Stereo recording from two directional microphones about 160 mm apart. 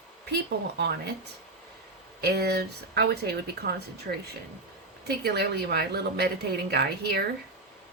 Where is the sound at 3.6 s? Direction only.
80° right.